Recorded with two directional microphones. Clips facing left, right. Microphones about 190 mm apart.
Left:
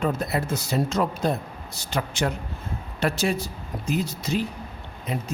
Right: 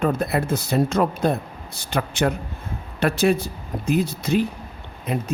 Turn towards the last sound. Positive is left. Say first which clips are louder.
# right 4 dB
turn(degrees=-55)  # may be behind; listen again after turning